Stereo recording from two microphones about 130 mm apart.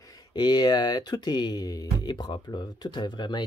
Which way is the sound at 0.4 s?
35° left (ahead or behind).